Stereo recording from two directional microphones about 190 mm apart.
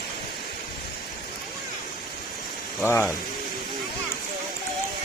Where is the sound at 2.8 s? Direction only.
15° left (ahead or behind).